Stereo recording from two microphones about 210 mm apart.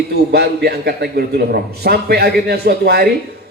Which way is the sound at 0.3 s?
50° right (ahead or behind).